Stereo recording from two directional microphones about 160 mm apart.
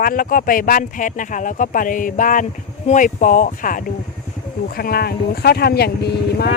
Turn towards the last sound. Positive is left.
turn(degrees=85)